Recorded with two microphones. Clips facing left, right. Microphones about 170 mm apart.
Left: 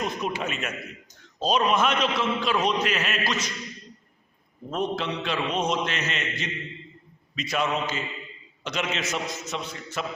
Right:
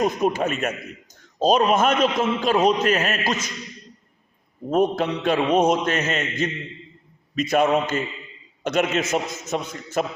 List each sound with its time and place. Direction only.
0.0 s a man's voice: 45° right (ahead or behind)
4.7 s a man's voice: 45° right (ahead or behind)